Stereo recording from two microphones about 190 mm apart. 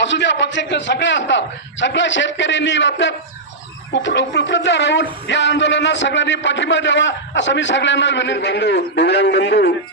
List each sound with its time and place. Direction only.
0.0 s speech: 70° left (ahead or behind)